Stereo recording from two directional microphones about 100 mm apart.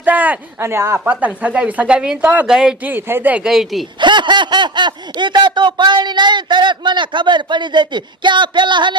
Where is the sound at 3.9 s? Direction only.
50° right (ahead or behind).